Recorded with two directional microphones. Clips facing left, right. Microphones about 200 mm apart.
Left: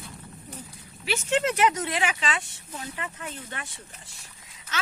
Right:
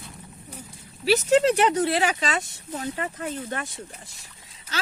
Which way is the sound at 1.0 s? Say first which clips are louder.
Right 7 dB; 35° right (ahead or behind).